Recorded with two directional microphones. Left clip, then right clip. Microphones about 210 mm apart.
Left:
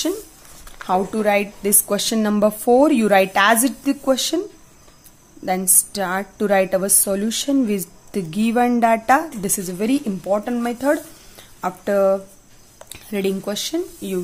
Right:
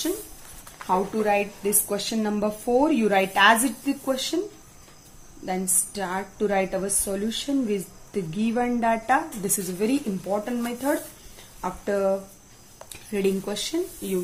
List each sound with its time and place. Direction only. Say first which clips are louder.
0.8 s a woman's voice: left 4 dB; 45° left (ahead or behind)
5.4 s a woman's voice: left 7 dB; 45° left (ahead or behind)